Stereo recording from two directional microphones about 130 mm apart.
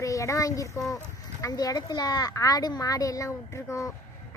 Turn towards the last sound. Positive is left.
turn(degrees=25)  # may be behind; listen again after turning